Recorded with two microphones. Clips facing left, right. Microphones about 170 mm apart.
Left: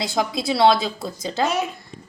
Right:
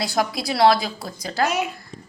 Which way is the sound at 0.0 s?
20° left (ahead or behind).